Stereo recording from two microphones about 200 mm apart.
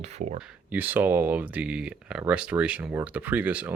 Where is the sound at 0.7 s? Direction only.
10° right (ahead or behind).